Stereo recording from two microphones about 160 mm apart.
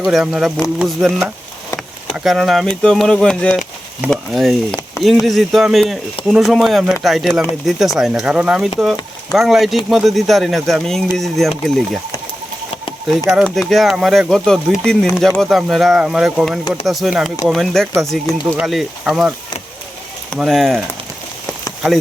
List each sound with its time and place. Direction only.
0.0 s speech: centre (ahead or behind)
13.3 s speech: centre (ahead or behind)
20.3 s speech: centre (ahead or behind)